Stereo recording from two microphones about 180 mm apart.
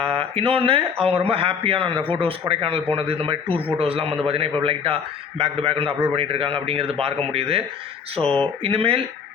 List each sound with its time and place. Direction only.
0.1 s a man's voice: 30° right (ahead or behind)
8.2 s speech: centre (ahead or behind)
8.6 s a man's voice: 30° right (ahead or behind)